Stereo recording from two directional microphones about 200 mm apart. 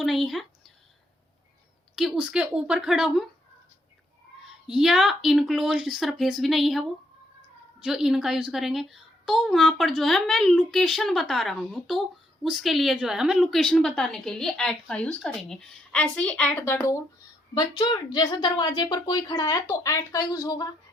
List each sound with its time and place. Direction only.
0.0 s a woman's voice: centre (ahead or behind)
2.0 s a woman's voice: 5° right (ahead or behind)
4.4 s a woman's voice: centre (ahead or behind); by 20.7 s 20° left (ahead or behind)